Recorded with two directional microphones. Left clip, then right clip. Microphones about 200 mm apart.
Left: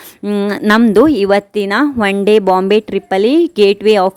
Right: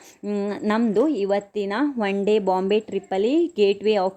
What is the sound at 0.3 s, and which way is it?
Speech, 30° left (ahead or behind).